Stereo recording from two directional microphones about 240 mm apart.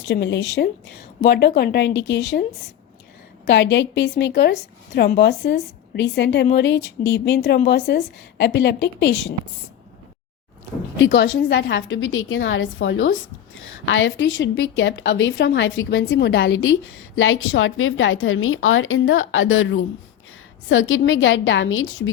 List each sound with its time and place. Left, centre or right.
0.1 s a woman's voice: left
3.4 s a woman's voice: left
11.0 s a woman's voice: left